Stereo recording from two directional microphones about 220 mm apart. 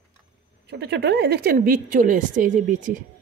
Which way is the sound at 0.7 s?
50° right (ahead or behind).